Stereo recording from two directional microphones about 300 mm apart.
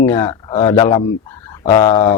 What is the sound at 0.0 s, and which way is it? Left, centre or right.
Speech, centre.